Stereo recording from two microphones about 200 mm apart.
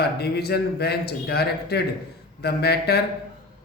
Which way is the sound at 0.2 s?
55° left (ahead or behind).